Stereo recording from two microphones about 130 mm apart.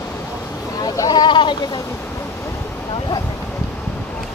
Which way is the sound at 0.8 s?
30° left (ahead or behind).